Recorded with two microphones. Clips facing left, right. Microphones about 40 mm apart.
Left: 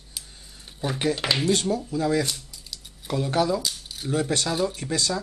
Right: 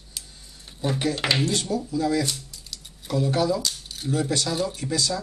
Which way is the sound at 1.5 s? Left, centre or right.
Left.